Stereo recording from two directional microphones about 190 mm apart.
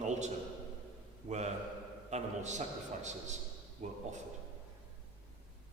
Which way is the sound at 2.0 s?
35° right (ahead or behind).